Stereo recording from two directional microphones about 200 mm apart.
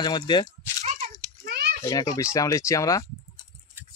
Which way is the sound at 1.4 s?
55° right (ahead or behind).